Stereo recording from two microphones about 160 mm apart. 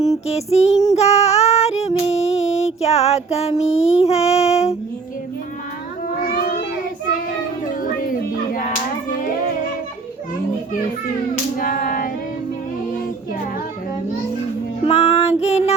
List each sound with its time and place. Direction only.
0.3 s music: 40° left (ahead or behind)
0.9 s female singing: 40° left (ahead or behind)
7.8 s a sound: 60° left (ahead or behind)
11.5 s female singing: 60° left (ahead or behind)
14.8 s music: 40° left (ahead or behind)